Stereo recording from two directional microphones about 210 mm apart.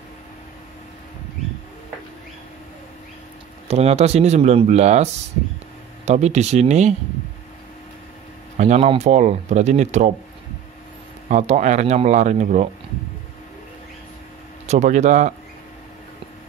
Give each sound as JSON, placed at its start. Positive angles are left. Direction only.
{"t": 3.6, "sound": "speech", "side_deg": -30}
{"t": 8.5, "sound": "speech", "side_deg": -30}
{"t": 11.2, "sound": "speech", "side_deg": -35}
{"t": 14.7, "sound": "speech", "side_deg": -35}